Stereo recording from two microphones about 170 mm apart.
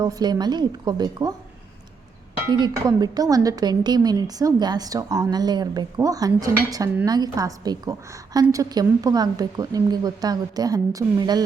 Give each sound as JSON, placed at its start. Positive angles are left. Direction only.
{"t": 0.0, "sound": "a woman's voice", "side_deg": -20}
{"t": 2.5, "sound": "a woman's voice", "side_deg": -25}